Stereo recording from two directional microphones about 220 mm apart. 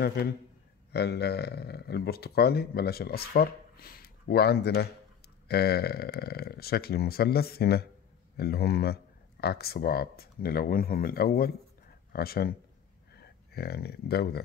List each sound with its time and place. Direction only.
0.0 s speech: 45° left (ahead or behind)